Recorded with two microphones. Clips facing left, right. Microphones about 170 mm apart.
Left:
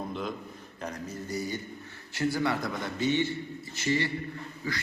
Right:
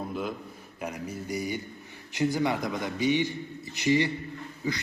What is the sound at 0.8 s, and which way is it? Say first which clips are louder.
A man's voice: right 2 dB; 10° right (ahead or behind).